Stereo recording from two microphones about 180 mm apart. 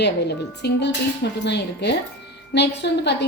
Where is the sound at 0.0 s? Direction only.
70° left (ahead or behind).